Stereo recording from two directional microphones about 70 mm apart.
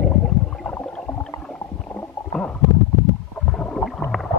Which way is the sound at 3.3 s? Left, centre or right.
Centre.